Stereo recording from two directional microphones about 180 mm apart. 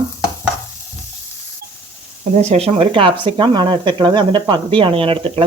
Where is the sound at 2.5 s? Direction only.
35° right (ahead or behind).